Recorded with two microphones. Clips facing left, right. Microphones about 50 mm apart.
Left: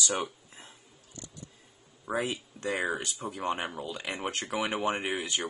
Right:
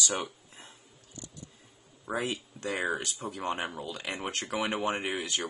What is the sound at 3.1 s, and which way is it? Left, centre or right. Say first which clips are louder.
Speech: even; left.